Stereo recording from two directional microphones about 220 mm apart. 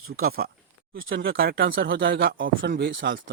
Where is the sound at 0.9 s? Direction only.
60° right (ahead or behind).